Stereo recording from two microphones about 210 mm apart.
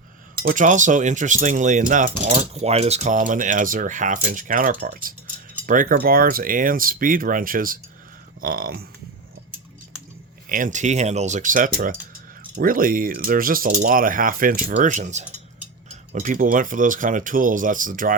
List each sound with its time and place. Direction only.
0.4 s speech: 35° right (ahead or behind)
10.5 s speech: 35° right (ahead or behind)